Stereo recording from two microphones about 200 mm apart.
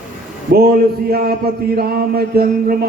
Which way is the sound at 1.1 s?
50° right (ahead or behind).